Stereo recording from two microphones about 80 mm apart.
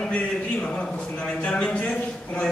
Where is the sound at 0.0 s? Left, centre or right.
Centre.